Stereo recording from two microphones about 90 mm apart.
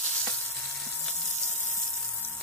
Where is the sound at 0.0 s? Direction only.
10° left (ahead or behind).